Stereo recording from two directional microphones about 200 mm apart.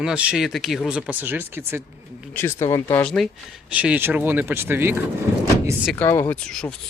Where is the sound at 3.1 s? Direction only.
Centre (ahead or behind).